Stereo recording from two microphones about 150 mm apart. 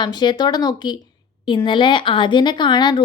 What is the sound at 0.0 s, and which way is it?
A woman's voice, 30° left (ahead or behind).